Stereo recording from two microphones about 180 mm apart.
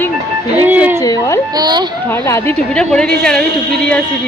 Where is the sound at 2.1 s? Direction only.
15° left (ahead or behind).